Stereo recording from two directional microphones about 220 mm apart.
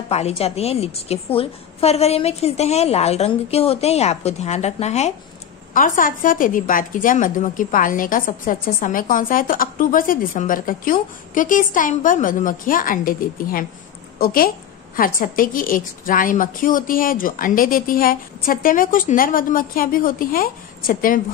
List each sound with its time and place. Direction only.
0.1 s a woman's voice: 30° left (ahead or behind)